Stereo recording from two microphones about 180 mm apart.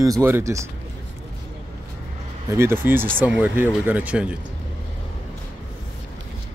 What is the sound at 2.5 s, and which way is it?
Speech, 15° right (ahead or behind).